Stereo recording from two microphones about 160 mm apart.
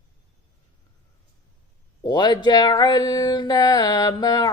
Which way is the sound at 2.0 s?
25° left (ahead or behind).